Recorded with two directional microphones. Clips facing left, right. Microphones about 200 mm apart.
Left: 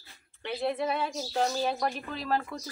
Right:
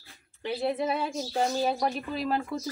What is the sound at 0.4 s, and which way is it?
A woman's voice, 5° right (ahead or behind).